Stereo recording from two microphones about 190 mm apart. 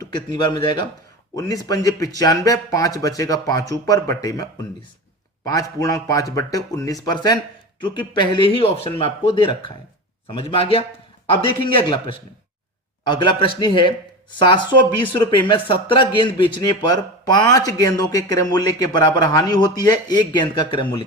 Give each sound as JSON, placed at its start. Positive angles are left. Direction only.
{"t": 0.1, "sound": "speech", "side_deg": 25}